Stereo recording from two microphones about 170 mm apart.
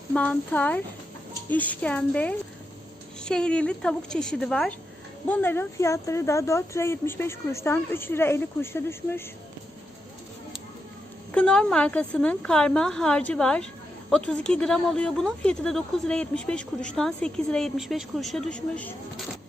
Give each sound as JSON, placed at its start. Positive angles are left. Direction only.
{"t": 0.1, "sound": "speech", "side_deg": 10}
{"t": 11.3, "sound": "speech", "side_deg": 5}